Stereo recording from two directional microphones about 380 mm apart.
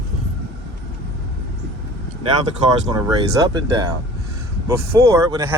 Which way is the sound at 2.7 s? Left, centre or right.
Centre.